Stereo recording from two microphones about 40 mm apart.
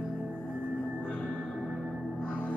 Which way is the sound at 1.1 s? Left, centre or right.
Left.